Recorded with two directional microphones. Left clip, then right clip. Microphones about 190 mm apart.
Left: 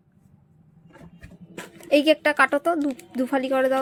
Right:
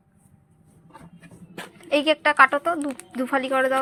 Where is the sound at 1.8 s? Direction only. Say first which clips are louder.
Left 2 dB; 40° left (ahead or behind).